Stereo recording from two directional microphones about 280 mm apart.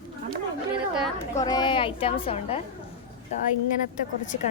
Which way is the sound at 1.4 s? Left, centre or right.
Centre.